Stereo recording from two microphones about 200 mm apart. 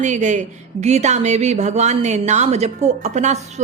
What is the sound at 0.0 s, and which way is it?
Speech, 35° right (ahead or behind).